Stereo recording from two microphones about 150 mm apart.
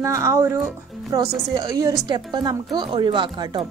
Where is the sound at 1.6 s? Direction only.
20° right (ahead or behind).